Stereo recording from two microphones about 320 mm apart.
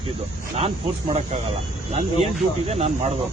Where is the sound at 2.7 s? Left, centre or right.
Centre.